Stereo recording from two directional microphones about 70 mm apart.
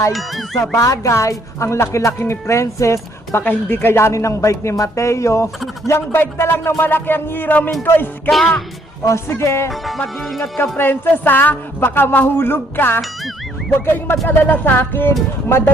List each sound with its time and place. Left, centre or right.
0.1 s speech: centre
0.8 s a woman's voice: left
3.4 s a woman's voice: left
8.3 s speech: centre
9.0 s a woman's voice: left
10.6 s a woman's voice: left